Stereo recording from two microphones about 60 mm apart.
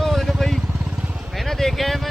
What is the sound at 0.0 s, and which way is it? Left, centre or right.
Vehicle, centre.